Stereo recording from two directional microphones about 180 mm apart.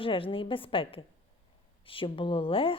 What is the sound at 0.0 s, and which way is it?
A woman's voice, 30° left (ahead or behind).